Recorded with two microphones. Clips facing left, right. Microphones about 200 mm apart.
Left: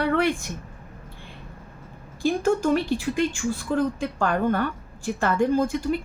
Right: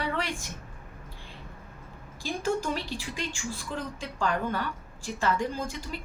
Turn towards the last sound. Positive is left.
turn(degrees=55)  # may be behind; listen again after turning